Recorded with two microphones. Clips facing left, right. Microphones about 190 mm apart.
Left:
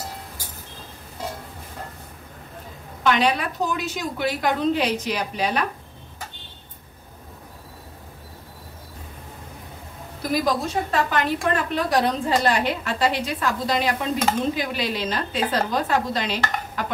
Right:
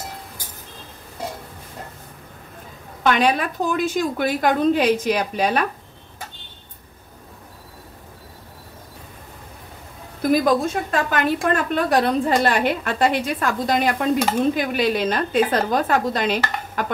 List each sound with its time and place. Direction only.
3.0 s a woman's voice: 50° right (ahead or behind)
10.4 s a woman's voice: 50° right (ahead or behind)